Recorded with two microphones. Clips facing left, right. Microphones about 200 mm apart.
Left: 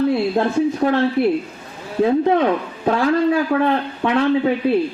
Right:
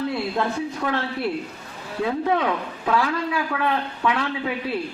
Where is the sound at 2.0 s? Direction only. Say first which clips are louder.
Left 7 dB; 30° left (ahead or behind).